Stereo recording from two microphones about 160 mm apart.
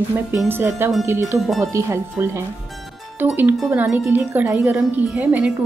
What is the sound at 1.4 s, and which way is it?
Speech, centre (ahead or behind).